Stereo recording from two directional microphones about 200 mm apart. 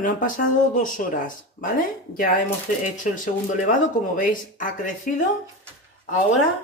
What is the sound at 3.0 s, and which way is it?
Speech, 40° left (ahead or behind).